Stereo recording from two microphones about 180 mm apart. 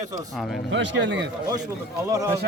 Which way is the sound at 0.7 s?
90° right.